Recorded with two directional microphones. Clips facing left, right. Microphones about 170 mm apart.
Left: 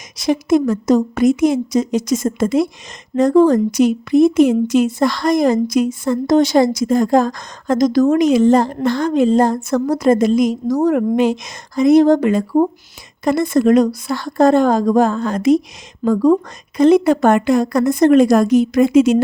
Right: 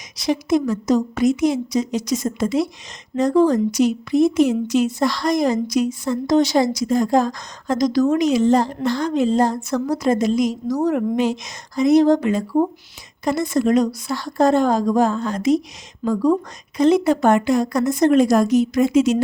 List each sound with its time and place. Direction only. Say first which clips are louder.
0.2 s a woman's voice: left 4 dB; 50° left (ahead or behind)